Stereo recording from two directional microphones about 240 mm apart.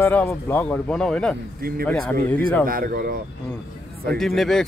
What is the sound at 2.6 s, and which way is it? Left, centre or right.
Speech, right.